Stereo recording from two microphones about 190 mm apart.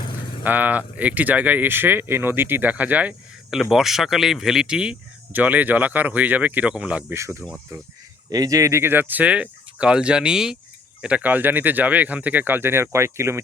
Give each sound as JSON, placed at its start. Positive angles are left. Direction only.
{"t": 0.4, "sound": "speech", "side_deg": -10}